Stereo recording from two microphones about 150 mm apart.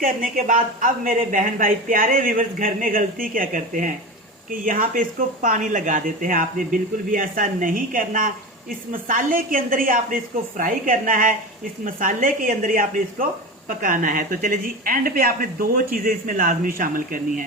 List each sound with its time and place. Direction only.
0.0 s a woman's voice: 65° right (ahead or behind)